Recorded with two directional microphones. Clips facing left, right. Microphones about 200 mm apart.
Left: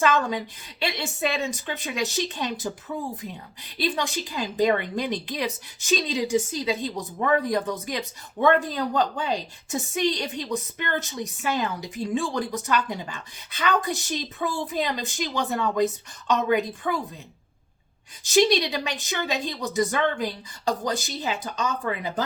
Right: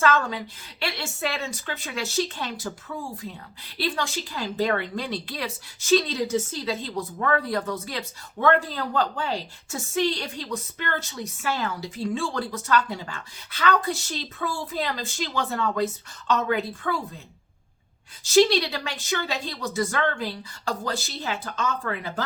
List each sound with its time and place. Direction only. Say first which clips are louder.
0.0 s a woman's voice: left 1 dB; 15° left (ahead or behind)
18.2 s a woman's voice: right 1 dB; 20° left (ahead or behind)